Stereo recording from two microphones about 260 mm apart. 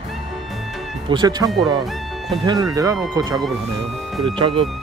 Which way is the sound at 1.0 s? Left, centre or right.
Centre.